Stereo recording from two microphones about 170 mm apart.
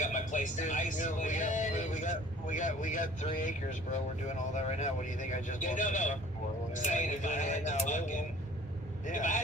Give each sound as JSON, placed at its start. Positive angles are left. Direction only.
{"t": 0.0, "sound": "speech", "side_deg": 45}